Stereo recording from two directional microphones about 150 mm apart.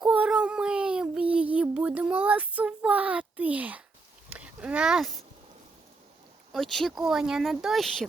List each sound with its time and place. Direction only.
0.0 s child singing: 5° right (ahead or behind)
4.3 s a sound: 10° right (ahead or behind)
6.5 s speech: centre (ahead or behind)